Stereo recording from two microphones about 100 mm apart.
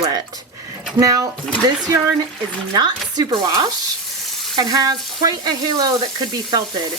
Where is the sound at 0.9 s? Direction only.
35° right (ahead or behind).